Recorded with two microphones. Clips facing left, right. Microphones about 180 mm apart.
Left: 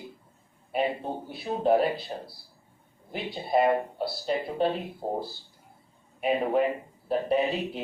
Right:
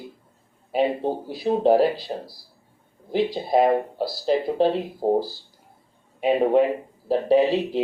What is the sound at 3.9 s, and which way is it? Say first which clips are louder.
Speech: right 4 dB; 90° right.